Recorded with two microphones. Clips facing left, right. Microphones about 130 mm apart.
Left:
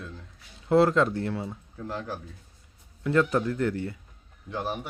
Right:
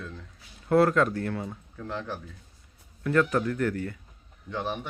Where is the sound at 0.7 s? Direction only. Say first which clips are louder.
Left 1 dB; 25° left (ahead or behind).